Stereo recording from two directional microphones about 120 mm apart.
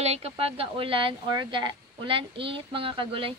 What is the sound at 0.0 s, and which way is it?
Speech, 60° right (ahead or behind).